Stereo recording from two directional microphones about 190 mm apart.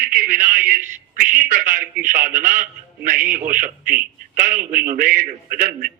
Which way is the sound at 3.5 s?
45° right (ahead or behind).